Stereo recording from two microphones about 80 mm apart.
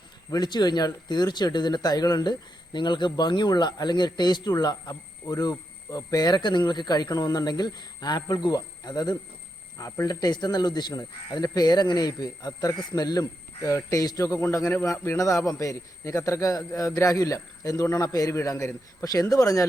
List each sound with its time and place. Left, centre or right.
0.3 s speech: left
9.7 s a man's voice: left